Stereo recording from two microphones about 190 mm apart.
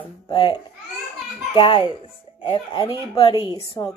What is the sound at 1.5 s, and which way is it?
Speech, 25° left (ahead or behind).